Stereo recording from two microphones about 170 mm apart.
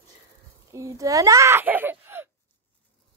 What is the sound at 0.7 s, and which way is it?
Speech, 20° right (ahead or behind).